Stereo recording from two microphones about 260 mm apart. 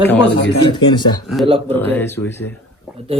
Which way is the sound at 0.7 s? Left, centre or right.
Centre.